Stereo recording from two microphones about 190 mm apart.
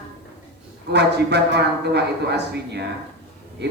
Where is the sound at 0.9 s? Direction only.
60° right (ahead or behind).